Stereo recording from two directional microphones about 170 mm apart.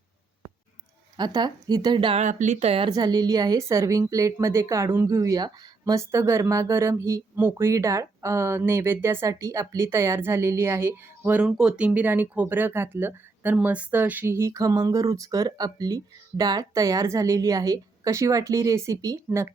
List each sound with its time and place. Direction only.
1.1 s a woman's voice: 25° right (ahead or behind)
2.2 s a woman's voice: 45° right (ahead or behind); by 19.5 s 20° right (ahead or behind)